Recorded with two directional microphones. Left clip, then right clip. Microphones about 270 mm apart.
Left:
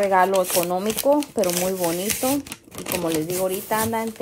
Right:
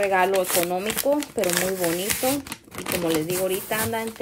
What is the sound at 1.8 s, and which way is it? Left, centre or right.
Speech, centre.